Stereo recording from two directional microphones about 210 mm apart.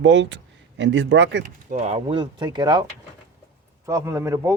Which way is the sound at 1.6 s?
30° right (ahead or behind).